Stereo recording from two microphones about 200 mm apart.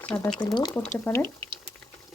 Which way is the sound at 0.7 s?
10° left (ahead or behind).